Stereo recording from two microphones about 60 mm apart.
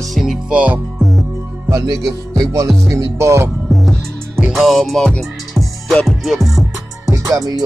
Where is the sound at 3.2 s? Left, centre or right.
Right.